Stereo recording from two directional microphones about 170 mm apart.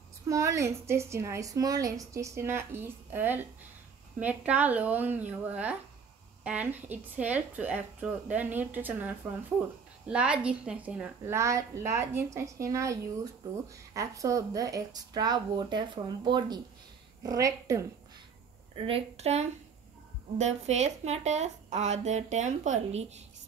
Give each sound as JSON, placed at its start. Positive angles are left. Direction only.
{"t": 0.3, "sound": "a woman's voice", "side_deg": -20}
{"t": 11.3, "sound": "a woman's voice", "side_deg": -15}
{"t": 18.8, "sound": "a woman's voice", "side_deg": -35}